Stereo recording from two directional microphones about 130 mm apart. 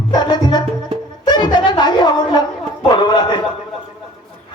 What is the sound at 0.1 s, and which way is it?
Music, 30° left (ahead or behind).